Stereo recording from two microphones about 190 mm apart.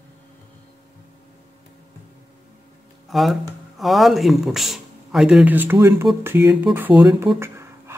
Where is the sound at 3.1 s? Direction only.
Centre (ahead or behind).